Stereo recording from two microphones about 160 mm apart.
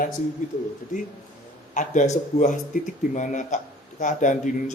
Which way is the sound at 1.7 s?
50° left (ahead or behind).